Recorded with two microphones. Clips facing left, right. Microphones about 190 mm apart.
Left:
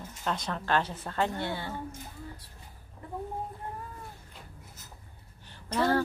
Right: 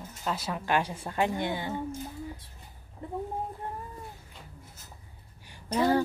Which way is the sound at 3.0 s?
25° right (ahead or behind).